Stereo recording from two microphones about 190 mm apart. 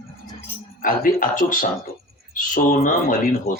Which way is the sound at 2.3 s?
45° left (ahead or behind).